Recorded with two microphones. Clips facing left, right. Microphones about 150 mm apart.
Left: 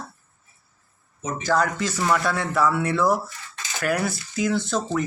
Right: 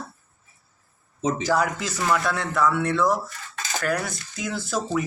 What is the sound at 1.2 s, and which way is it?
Speech, 90° right.